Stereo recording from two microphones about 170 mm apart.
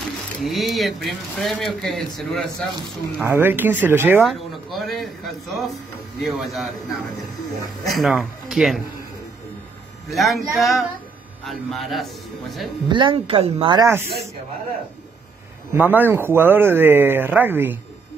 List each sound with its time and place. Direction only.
0.4 s speech: centre (ahead or behind)
3.3 s speech: 10° right (ahead or behind)
4.2 s speech: centre (ahead or behind)
10.1 s speech: centre (ahead or behind)
12.8 s speech: 30° right (ahead or behind)
15.7 s speech: 10° right (ahead or behind)